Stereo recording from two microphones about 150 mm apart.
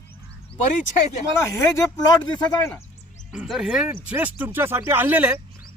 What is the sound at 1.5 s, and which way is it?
Speech, 20° left (ahead or behind).